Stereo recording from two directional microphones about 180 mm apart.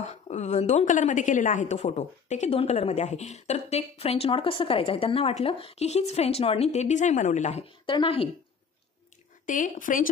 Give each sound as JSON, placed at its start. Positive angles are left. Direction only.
{"t": 0.0, "sound": "a woman's voice", "side_deg": 40}
{"t": 7.8, "sound": "speech", "side_deg": 30}
{"t": 9.5, "sound": "speech", "side_deg": 45}